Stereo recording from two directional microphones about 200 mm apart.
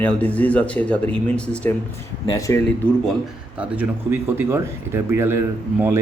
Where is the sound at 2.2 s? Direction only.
15° left (ahead or behind).